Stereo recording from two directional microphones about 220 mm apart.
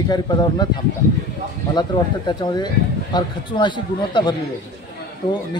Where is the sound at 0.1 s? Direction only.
20° left (ahead or behind).